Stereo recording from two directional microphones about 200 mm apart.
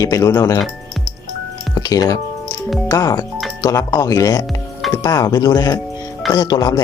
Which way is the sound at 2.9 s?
20° left (ahead or behind).